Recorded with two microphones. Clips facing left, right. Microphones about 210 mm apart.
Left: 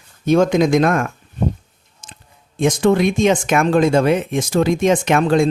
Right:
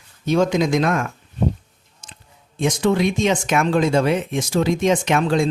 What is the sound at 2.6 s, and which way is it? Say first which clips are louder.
Speech: left 4 dB; 50° left (ahead or behind).